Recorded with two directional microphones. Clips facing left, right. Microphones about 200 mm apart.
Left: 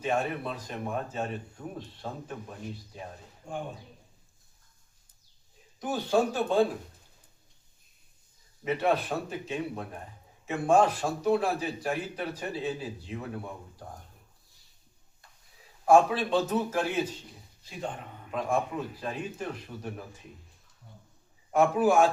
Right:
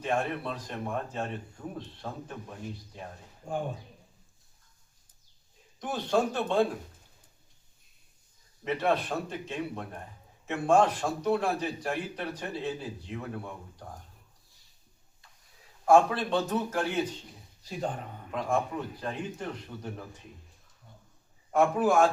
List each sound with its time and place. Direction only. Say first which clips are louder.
0.0 s a man's voice: left 1 dB; 5° left (ahead or behind)
5.8 s speech: left 1 dB; 5° left (ahead or behind)
8.6 s a man's voice: left 1 dB; 5° left (ahead or behind)
15.9 s speech: left 1 dB; 5° left (ahead or behind)
17.6 s a man's voice: right 3 dB; 40° right (ahead or behind)
18.3 s a man's voice: left 1 dB; 10° left (ahead or behind)
21.5 s speech: left 1 dB; 5° left (ahead or behind)